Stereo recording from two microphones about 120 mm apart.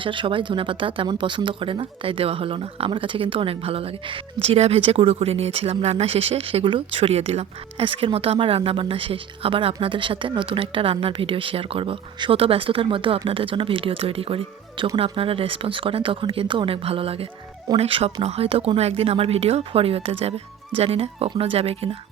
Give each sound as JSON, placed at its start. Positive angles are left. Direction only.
{"t": 0.0, "sound": "speech", "side_deg": -45}